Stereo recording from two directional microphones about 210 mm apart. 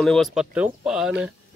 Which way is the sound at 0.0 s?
Centre (ahead or behind).